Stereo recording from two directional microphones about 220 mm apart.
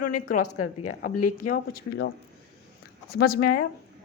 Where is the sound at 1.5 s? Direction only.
40° left (ahead or behind).